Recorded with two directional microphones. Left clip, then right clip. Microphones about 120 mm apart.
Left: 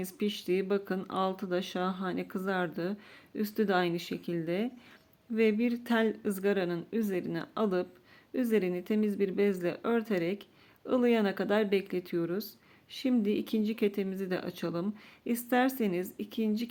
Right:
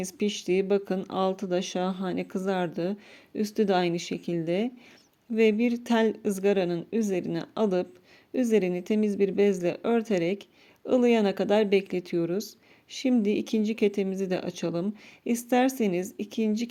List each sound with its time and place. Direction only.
0.0 s speech: 35° right (ahead or behind)